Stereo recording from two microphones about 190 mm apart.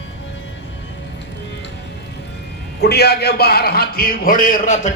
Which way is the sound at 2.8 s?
60° left (ahead or behind).